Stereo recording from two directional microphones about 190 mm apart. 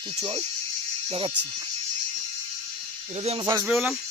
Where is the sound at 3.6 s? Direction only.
5° right (ahead or behind).